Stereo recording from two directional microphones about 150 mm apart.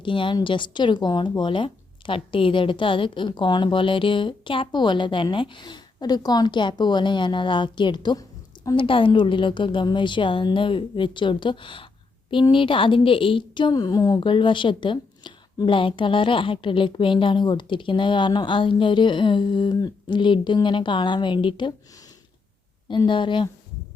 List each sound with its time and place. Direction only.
0.0 s a woman's voice: 35° left (ahead or behind)
22.9 s a woman's voice: 35° left (ahead or behind)